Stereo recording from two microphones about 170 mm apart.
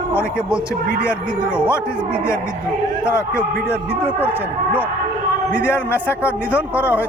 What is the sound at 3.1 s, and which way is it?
Speech, 15° left (ahead or behind).